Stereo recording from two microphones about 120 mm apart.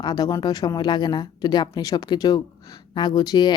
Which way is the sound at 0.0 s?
35° left (ahead or behind).